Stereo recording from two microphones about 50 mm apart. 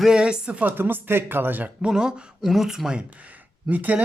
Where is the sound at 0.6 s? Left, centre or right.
Right.